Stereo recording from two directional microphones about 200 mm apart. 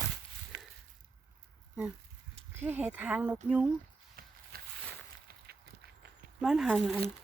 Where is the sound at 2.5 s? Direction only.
10° right (ahead or behind).